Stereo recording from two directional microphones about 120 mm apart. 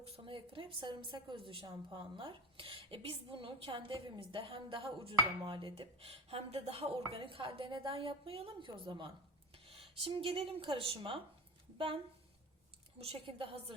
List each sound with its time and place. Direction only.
0.0 s a woman's voice: 50° right (ahead or behind)
13.0 s a woman's voice: 55° right (ahead or behind)